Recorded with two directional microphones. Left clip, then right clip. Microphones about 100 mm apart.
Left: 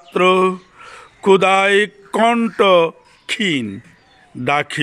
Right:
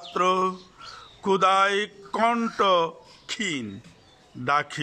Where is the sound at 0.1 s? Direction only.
20° left (ahead or behind).